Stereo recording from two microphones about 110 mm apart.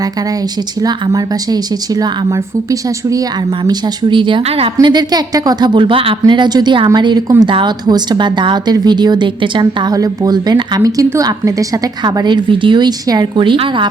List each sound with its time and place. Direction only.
0.8 s a woman's voice: 35° right (ahead or behind)
3.6 s speech: 40° right (ahead or behind)
4.4 s a woman's voice: 65° right (ahead or behind)
4.8 s a woman's voice: 40° right (ahead or behind)